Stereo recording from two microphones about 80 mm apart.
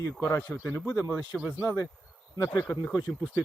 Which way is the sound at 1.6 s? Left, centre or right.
Left.